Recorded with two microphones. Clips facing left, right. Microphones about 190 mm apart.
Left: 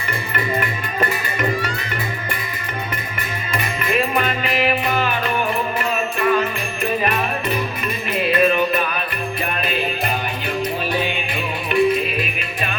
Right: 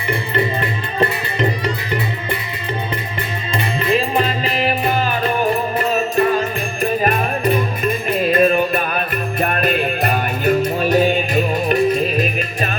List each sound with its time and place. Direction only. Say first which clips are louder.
0.1 s music: right 4 dB; 30° right (ahead or behind)
3.6 s music: right 3 dB; 30° right (ahead or behind)